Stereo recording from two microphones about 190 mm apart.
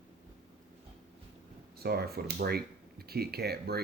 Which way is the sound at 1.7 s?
55° right (ahead or behind).